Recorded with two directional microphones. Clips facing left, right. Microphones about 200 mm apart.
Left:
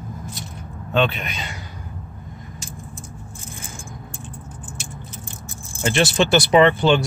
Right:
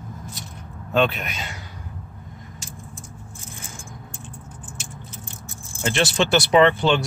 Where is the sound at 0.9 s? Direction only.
Centre (ahead or behind).